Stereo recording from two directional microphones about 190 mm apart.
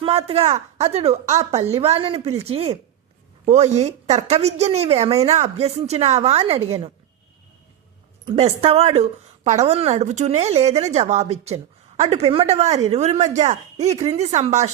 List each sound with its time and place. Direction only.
0.0 s a woman's voice: 30° right (ahead or behind)
8.2 s a woman's voice: 30° right (ahead or behind)